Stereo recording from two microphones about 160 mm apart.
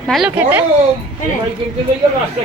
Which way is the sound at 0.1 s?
5° right (ahead or behind).